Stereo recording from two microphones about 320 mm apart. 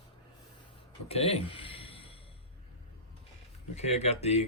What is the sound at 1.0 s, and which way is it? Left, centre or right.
Speech, centre.